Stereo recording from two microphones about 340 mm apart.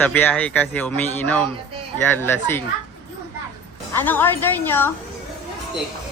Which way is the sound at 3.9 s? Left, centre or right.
Centre.